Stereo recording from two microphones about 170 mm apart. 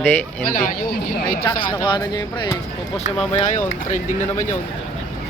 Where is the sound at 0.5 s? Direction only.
55° left (ahead or behind).